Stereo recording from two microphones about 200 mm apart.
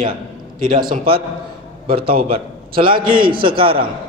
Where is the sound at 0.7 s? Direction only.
45° right (ahead or behind).